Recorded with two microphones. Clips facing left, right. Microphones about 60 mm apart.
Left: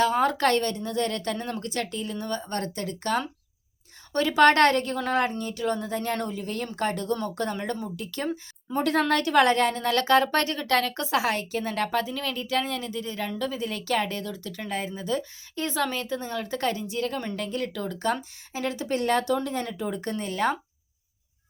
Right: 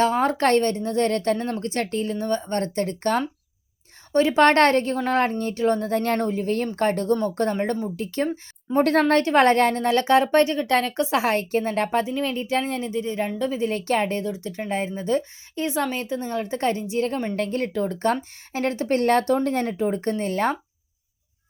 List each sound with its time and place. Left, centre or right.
0.0 s speech: right
4.1 s speech: right
6.1 s speech: right
9.8 s a woman's voice: right
15.6 s a woman's voice: right
17.3 s speech: right